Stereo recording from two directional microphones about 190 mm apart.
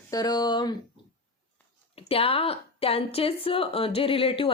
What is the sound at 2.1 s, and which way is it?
A woman's voice, 30° left (ahead or behind).